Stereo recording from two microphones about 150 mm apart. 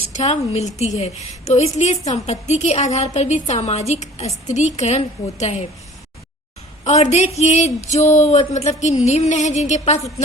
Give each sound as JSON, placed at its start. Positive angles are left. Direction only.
{"t": 0.1, "sound": "a woman's voice", "side_deg": 50}
{"t": 6.8, "sound": "a woman's voice", "side_deg": 50}